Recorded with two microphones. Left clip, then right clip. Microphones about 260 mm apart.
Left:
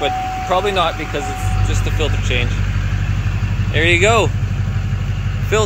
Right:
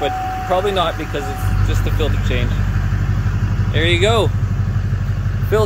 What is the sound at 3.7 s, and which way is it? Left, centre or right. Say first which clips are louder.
Speech: left 3 dB; centre.